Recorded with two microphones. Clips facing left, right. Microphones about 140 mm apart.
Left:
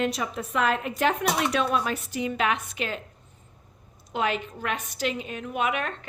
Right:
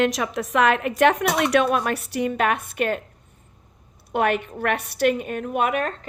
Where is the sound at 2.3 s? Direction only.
55° right (ahead or behind).